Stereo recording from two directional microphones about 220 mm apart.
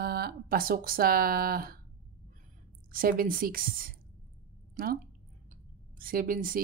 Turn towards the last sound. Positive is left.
turn(degrees=-40)  # may be behind; listen again after turning